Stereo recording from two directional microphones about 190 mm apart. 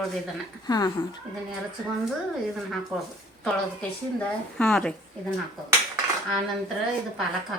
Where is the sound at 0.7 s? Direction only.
20° left (ahead or behind).